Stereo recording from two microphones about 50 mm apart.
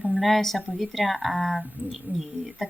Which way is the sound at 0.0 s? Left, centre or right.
Centre.